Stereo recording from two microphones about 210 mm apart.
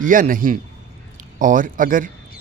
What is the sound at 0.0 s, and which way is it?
Speech, 40° right (ahead or behind).